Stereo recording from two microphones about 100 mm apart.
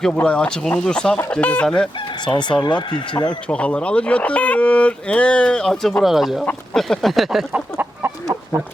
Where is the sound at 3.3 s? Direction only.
10° left (ahead or behind).